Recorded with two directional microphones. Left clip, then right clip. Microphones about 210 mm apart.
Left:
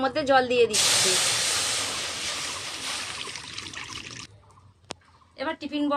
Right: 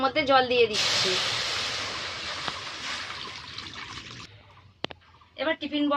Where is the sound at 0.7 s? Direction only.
20° left (ahead or behind).